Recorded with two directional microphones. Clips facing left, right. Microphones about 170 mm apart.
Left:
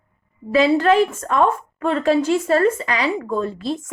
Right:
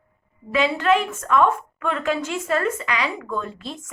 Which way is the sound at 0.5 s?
35° left (ahead or behind).